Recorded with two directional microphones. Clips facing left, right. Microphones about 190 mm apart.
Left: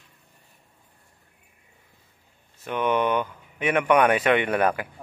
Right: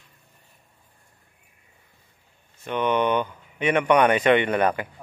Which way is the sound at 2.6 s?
5° left (ahead or behind).